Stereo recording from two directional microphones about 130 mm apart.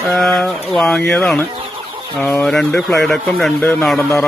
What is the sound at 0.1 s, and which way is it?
Speech, centre (ahead or behind).